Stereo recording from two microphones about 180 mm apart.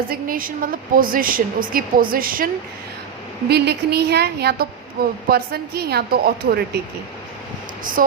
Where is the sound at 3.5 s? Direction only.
65° right (ahead or behind).